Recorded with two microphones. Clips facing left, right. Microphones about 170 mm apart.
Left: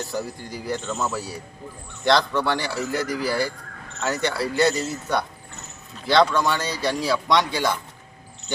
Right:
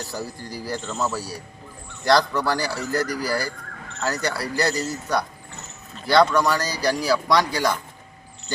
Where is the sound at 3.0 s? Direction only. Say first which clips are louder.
Left 2 dB; 25° left (ahead or behind).